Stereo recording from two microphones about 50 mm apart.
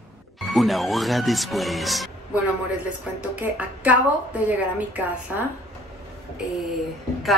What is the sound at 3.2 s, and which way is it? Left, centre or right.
A woman's voice, right.